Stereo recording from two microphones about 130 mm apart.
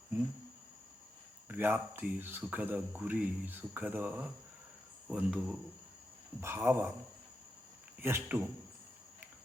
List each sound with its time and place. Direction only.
1.5 s speech: 15° right (ahead or behind)
6.4 s speech: 20° right (ahead or behind)
8.0 s speech: 15° right (ahead or behind)